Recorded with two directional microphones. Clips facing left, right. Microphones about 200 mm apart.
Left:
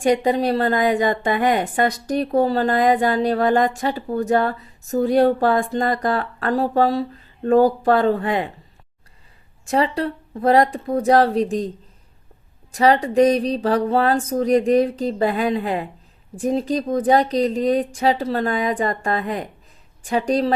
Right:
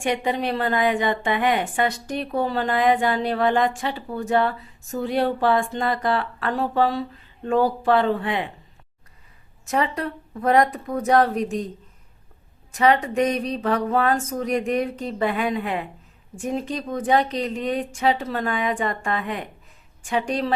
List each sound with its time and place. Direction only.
0.0 s a woman's voice: 40° left (ahead or behind)
9.6 s a woman's voice: 30° left (ahead or behind)
12.7 s a woman's voice: 35° left (ahead or behind)